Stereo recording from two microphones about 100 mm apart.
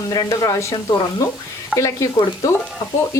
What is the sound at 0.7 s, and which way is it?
Speech, 45° left (ahead or behind).